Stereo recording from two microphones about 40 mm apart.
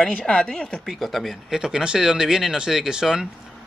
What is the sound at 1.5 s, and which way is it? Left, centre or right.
Speech, centre.